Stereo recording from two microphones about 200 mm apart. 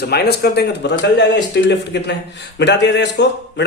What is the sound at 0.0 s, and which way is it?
A man's voice, 55° left (ahead or behind).